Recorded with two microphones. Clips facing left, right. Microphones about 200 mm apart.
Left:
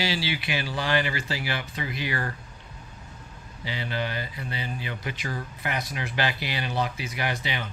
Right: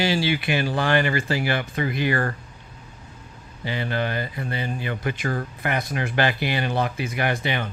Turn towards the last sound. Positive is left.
turn(degrees=-55)  # may be behind; listen again after turning